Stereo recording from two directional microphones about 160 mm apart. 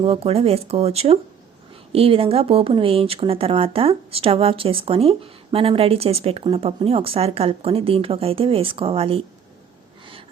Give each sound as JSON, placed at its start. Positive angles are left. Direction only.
{"t": 0.0, "sound": "speech", "side_deg": -40}